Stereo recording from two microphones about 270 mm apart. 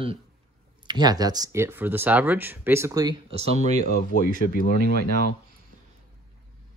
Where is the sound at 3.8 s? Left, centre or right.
Left.